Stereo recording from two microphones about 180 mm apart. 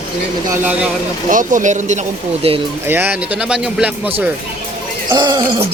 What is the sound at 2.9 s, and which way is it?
A man's voice, 10° right (ahead or behind).